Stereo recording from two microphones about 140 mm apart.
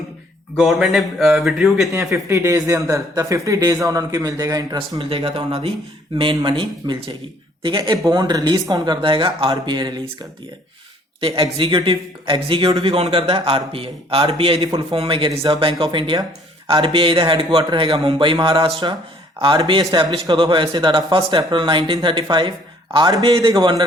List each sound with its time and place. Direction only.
0.5 s speech: centre (ahead or behind)
1.9 s a man's voice: 20° right (ahead or behind)
4.9 s a man's voice: 45° right (ahead or behind)
11.2 s a man's voice: 40° right (ahead or behind)